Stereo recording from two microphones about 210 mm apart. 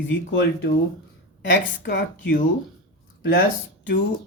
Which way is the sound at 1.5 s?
50° left (ahead or behind).